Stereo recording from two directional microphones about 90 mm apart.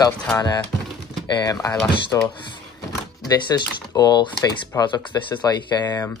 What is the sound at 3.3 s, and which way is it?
Speech, 50° left (ahead or behind).